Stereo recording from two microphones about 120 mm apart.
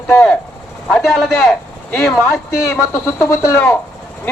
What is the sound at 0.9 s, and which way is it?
Speech, centre (ahead or behind).